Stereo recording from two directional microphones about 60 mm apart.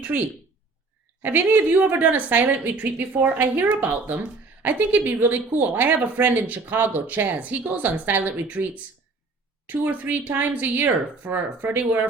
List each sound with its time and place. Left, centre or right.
0.1 s a woman's voice: right